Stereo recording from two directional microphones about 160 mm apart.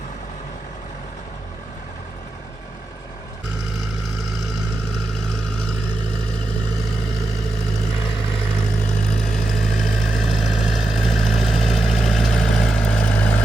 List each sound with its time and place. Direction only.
3.8 s vehicle: centre (ahead or behind)
6.8 s vehicle: centre (ahead or behind)
8.0 s vehicle: 35° left (ahead or behind)
9.0 s vehicle: 5° left (ahead or behind)